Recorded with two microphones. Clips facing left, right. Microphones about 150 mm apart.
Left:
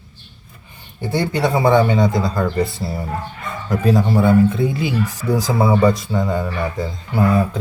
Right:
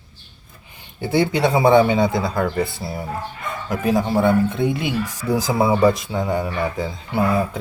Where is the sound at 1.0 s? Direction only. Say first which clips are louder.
Right 1 dB; 10° right (ahead or behind).